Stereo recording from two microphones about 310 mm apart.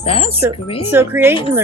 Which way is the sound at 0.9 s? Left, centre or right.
Centre.